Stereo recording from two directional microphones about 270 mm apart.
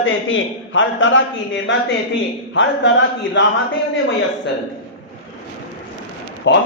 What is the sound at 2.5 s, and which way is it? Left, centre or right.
Speech, left.